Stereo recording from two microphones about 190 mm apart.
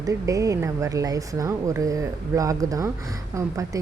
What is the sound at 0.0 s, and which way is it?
A woman's voice, 15° right (ahead or behind).